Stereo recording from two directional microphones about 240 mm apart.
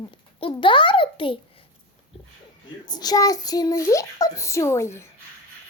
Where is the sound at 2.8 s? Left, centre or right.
Centre.